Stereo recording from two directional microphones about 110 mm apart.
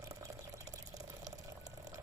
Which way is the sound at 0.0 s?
30° right (ahead or behind).